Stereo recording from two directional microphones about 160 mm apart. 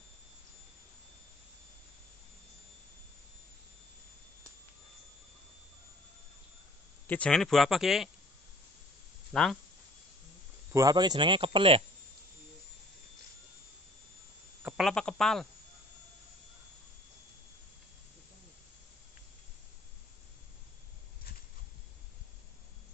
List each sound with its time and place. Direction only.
7.1 s speech: 5° left (ahead or behind)
9.3 s speech: centre (ahead or behind)
10.7 s speech: 20° right (ahead or behind)
14.6 s speech: 5° right (ahead or behind)